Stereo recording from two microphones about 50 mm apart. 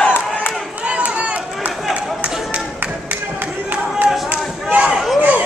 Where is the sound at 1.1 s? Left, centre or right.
Right.